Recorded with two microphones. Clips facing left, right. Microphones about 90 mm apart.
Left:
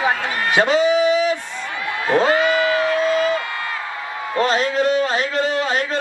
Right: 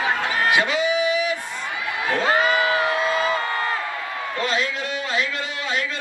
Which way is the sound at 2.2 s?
35° right (ahead or behind).